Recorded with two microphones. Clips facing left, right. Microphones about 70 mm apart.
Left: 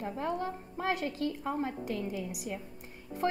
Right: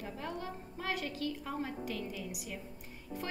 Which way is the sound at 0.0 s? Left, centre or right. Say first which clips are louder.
Left 7 dB; left.